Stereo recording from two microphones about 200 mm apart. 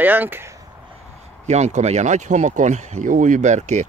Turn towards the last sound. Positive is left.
turn(degrees=-35)  # may be behind; listen again after turning